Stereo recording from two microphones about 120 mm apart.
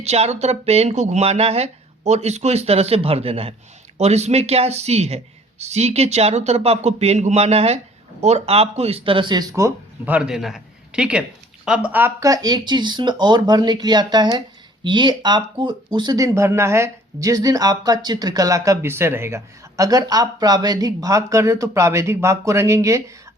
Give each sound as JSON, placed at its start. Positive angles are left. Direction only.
{"t": 0.0, "sound": "a man's voice", "side_deg": -60}
{"t": 10.1, "sound": "a man's voice", "side_deg": -5}
{"t": 12.2, "sound": "speech", "side_deg": -30}